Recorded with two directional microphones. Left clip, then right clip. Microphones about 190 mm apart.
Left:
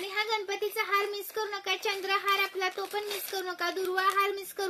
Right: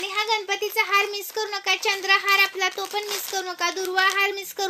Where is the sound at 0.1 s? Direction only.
15° left (ahead or behind).